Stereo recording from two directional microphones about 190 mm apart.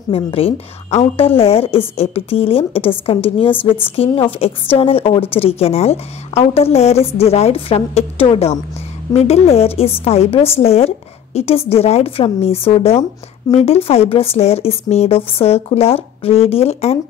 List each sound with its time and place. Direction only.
0.1 s a woman's voice: 30° left (ahead or behind)